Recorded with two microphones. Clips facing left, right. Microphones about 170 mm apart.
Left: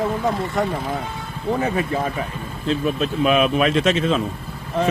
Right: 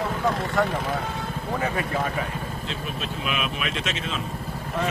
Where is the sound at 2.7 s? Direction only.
40° left (ahead or behind).